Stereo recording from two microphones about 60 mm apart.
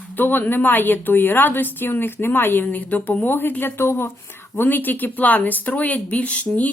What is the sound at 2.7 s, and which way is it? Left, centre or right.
Speech, left.